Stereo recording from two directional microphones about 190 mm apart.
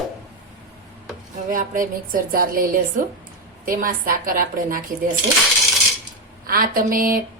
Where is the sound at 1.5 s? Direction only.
45° right (ahead or behind).